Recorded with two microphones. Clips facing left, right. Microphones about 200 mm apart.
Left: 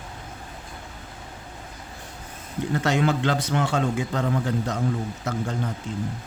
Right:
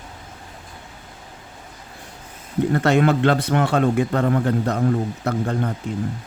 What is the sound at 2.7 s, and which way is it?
A man's voice, 60° right (ahead or behind).